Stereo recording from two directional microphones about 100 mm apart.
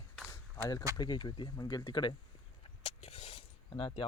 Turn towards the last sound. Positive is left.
turn(degrees=60)  # may be behind; listen again after turning